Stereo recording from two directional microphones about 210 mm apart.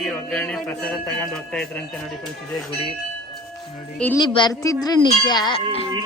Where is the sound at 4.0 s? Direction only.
5° left (ahead or behind).